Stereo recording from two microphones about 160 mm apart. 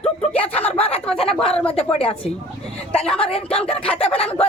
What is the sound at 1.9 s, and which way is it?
Speech, 40° left (ahead or behind).